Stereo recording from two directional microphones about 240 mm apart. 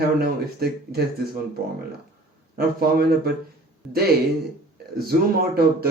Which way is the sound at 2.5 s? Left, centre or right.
Right.